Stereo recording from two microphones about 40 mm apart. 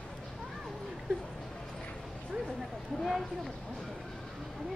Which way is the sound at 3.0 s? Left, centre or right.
Centre.